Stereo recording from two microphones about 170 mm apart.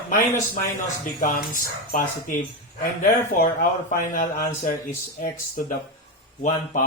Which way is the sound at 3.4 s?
50° left (ahead or behind).